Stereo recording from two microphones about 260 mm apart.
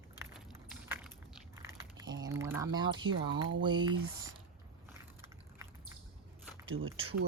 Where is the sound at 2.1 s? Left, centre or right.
Centre.